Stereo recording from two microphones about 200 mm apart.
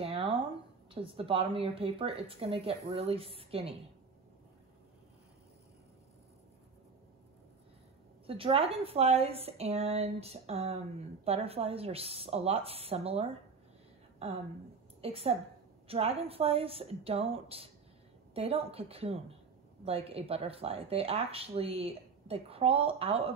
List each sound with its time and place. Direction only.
0.0 s a sound: 25° right (ahead or behind)
0.9 s speech: 25° right (ahead or behind)
8.3 s speech: 30° right (ahead or behind)
15.0 s a woman's voice: 30° right (ahead or behind)